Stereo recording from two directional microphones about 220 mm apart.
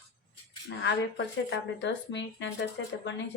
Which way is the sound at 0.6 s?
50° left (ahead or behind).